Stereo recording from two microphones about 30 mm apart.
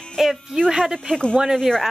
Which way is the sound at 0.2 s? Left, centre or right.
Centre.